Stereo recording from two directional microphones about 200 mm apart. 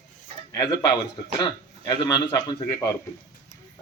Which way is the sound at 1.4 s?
20° left (ahead or behind).